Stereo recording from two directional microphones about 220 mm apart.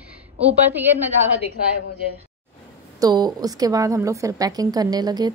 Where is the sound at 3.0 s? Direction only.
20° right (ahead or behind).